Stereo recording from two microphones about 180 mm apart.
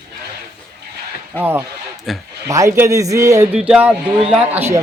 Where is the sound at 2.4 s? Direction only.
15° right (ahead or behind).